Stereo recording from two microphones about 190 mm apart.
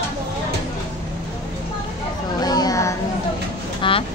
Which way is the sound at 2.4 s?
20° left (ahead or behind).